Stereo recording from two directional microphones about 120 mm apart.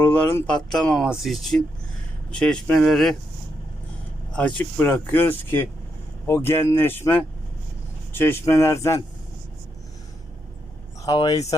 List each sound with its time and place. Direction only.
0.0 s speech: 15° left (ahead or behind)
0.4 s speech: 5° left (ahead or behind)
4.3 s speech: 10° left (ahead or behind); by 9.0 s 25° left (ahead or behind)
11.0 s speech: 30° left (ahead or behind)